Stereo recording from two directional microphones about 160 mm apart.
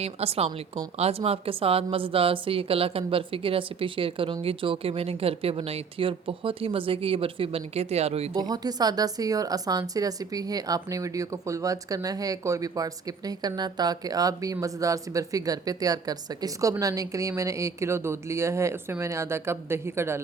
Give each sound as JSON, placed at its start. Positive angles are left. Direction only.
{"t": 0.0, "sound": "a woman's voice", "side_deg": -40}
{"t": 8.4, "sound": "a woman's voice", "side_deg": -25}